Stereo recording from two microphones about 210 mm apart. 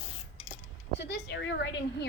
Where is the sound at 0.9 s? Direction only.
55° left (ahead or behind).